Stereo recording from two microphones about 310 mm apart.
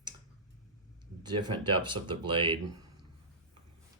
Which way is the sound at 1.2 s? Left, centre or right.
Centre.